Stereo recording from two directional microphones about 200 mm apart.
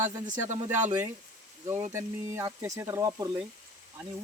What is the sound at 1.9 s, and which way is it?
Speech, 15° right (ahead or behind).